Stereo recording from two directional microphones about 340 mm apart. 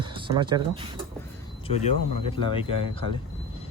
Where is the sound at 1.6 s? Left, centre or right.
Centre.